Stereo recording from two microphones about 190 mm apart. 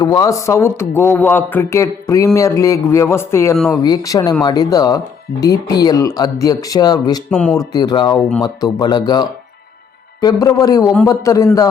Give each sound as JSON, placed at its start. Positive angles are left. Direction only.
{"t": 0.0, "sound": "a man's voice", "side_deg": 20}
{"t": 7.3, "sound": "speech", "side_deg": 5}
{"t": 7.5, "sound": "a man's voice", "side_deg": 20}